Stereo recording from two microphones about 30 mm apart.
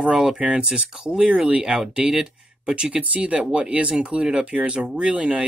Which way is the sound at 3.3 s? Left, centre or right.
Right.